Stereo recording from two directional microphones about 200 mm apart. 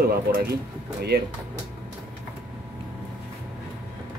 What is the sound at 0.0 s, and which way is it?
Speech, 50° right (ahead or behind).